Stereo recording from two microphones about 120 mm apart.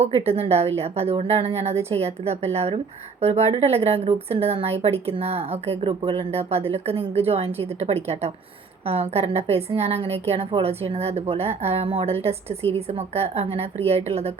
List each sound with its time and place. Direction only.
0.0 s a woman's voice: 60° right (ahead or behind)